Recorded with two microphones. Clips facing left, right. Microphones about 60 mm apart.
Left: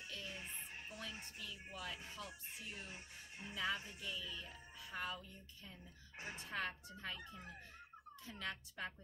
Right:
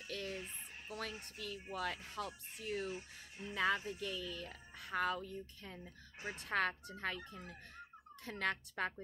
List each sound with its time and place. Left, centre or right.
0.1 s a sound: right
1.4 s speech: right
2.9 s speech: left
3.5 s speech: right
8.3 s speech: right